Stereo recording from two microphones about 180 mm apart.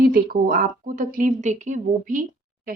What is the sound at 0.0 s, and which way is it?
A woman's voice, 55° right (ahead or behind).